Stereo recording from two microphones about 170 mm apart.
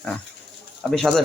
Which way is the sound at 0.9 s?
Centre (ahead or behind).